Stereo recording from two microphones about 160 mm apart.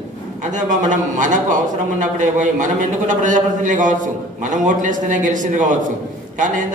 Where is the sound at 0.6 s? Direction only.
50° right (ahead or behind).